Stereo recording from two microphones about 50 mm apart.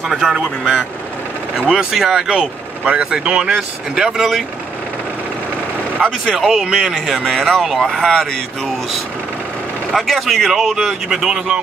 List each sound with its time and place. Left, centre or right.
0.3 s speech: centre
5.9 s speech: centre
9.9 s speech: centre